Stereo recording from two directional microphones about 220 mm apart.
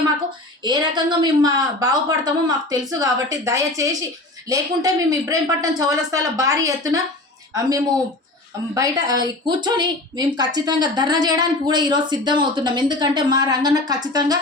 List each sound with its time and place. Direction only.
0.6 s speech: 20° right (ahead or behind)
8.7 s a woman's voice: 15° right (ahead or behind)